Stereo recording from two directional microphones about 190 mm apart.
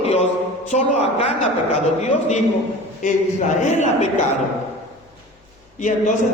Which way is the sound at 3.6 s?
40° left (ahead or behind).